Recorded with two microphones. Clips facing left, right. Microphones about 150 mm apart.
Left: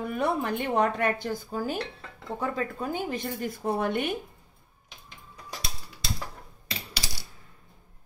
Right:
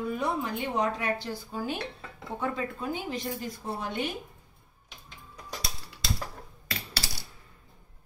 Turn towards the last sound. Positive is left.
turn(degrees=15)  # may be behind; listen again after turning